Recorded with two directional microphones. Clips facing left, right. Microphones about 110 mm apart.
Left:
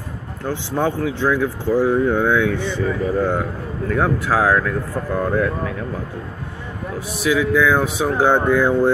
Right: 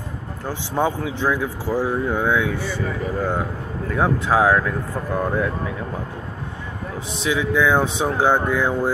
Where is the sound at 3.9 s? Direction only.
15° right (ahead or behind).